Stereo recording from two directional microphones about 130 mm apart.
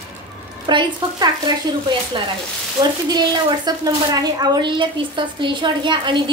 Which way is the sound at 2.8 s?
25° right (ahead or behind).